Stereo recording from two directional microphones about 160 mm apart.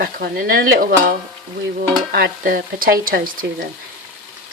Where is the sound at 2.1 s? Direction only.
70° right (ahead or behind).